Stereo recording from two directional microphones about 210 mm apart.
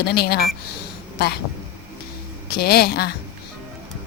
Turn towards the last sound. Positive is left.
turn(degrees=50)  # may be behind; listen again after turning